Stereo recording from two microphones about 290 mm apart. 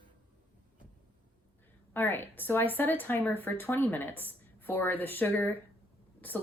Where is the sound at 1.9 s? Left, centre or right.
Centre.